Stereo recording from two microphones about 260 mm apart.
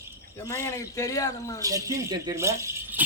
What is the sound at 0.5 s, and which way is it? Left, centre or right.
A man's voice, centre.